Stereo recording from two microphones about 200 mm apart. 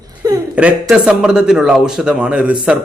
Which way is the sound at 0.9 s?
5° right (ahead or behind).